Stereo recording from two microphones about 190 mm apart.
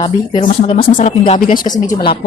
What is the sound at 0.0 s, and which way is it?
Speech, 30° left (ahead or behind).